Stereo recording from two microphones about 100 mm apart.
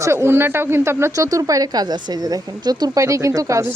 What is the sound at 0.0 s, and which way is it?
A woman's voice, 25° right (ahead or behind).